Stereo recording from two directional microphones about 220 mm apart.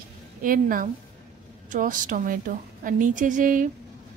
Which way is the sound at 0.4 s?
40° right (ahead or behind).